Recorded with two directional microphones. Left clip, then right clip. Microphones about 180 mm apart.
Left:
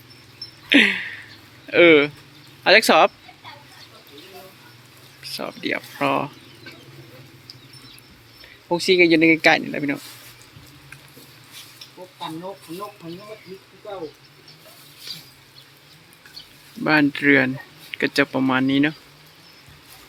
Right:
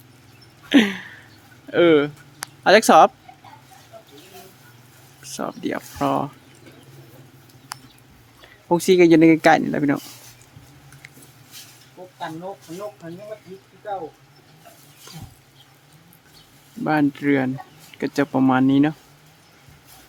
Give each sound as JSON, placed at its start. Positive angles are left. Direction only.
{"t": 0.7, "sound": "a sound", "side_deg": -25}
{"t": 1.7, "sound": "speech", "side_deg": -20}
{"t": 2.6, "sound": "speech", "side_deg": -35}
{"t": 5.4, "sound": "speech", "side_deg": -30}
{"t": 8.7, "sound": "speech", "side_deg": -45}
{"t": 13.0, "sound": "speech", "side_deg": 25}
{"t": 16.8, "sound": "speech", "side_deg": -15}